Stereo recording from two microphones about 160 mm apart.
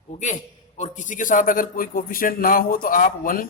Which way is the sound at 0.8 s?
50° left (ahead or behind).